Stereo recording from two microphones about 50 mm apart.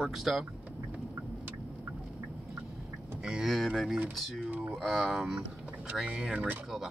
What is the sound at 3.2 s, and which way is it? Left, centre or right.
Speech, centre.